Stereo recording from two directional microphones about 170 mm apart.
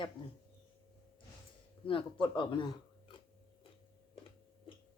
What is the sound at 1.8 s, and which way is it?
Speech, 30° left (ahead or behind).